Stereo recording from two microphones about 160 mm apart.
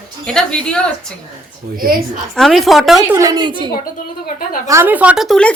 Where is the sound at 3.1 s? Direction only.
20° right (ahead or behind).